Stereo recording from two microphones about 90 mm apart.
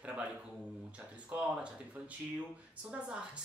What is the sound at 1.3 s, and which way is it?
Speech, 20° right (ahead or behind).